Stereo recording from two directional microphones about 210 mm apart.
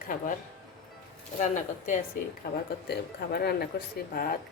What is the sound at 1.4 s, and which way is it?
Speech, 35° left (ahead or behind).